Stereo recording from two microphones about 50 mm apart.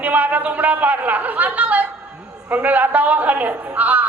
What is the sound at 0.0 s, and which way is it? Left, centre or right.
A man's voice, right.